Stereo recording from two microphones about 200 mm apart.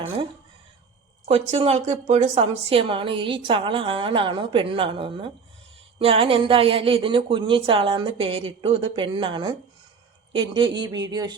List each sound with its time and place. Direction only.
1.2 s a woman's voice: 30° right (ahead or behind)